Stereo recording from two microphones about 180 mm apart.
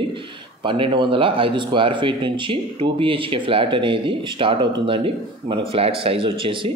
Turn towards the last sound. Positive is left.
turn(degrees=-30)  # may be behind; listen again after turning